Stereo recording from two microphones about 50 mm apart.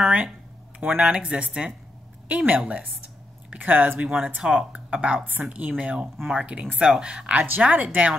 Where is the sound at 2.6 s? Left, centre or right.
Centre.